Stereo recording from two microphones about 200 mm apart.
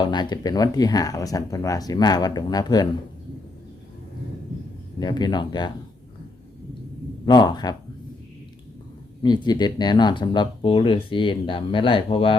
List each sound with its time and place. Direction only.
0.0 s speech: 20° left (ahead or behind)
4.9 s speech: 20° left (ahead or behind)
7.3 s speech: 20° left (ahead or behind)
9.2 s speech: 20° left (ahead or behind)